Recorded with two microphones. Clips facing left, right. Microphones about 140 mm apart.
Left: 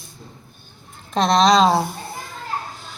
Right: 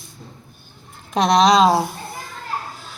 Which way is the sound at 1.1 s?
10° right (ahead or behind).